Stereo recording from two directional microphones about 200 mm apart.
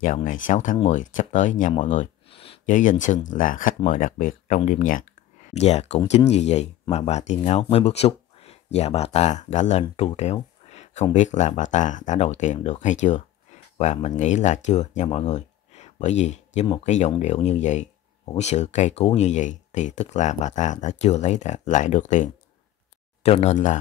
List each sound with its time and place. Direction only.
0.0 s speech: 40° left (ahead or behind)